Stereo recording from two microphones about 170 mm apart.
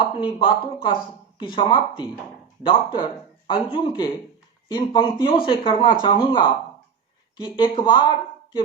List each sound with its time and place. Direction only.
0.0 s speech: 30° left (ahead or behind)